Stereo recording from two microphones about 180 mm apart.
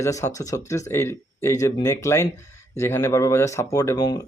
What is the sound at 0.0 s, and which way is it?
Speech, 15° left (ahead or behind).